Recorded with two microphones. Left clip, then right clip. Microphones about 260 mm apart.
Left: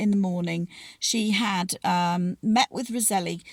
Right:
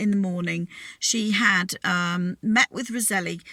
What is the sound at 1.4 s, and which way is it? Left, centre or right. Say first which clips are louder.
Speech: right 5 dB; right.